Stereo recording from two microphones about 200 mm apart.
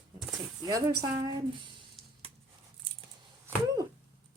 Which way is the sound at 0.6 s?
20° right (ahead or behind).